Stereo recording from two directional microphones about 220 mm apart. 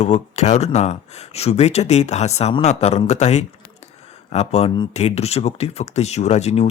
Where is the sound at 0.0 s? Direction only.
30° left (ahead or behind).